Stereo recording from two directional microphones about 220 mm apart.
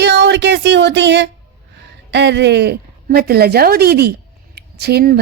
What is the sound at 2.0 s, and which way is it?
Speech, 50° right (ahead or behind).